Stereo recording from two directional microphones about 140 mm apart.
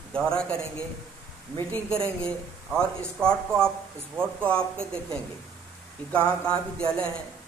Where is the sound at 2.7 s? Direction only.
5° left (ahead or behind).